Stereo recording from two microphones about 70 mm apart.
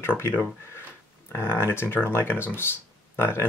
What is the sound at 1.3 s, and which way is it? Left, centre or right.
Speech, left.